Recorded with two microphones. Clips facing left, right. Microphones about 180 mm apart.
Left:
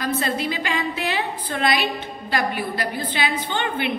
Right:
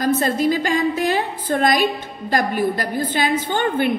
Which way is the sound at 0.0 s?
45° right (ahead or behind).